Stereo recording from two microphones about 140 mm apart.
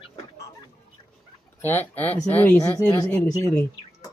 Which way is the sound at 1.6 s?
15° left (ahead or behind).